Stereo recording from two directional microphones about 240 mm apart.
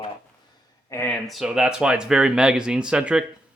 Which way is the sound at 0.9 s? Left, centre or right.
Centre.